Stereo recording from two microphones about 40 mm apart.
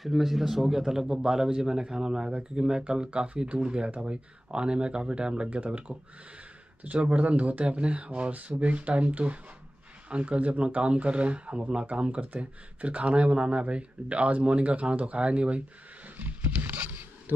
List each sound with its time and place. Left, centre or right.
0.0 s a man's voice: centre; by 15.6 s right
16.2 s roaring cats: right